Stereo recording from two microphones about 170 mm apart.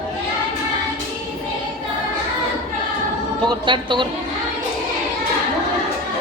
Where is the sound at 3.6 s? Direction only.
30° right (ahead or behind).